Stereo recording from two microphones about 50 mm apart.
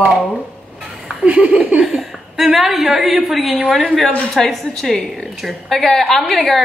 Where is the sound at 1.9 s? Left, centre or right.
Centre.